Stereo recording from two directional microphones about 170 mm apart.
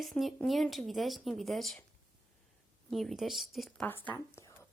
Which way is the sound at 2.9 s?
Centre (ahead or behind).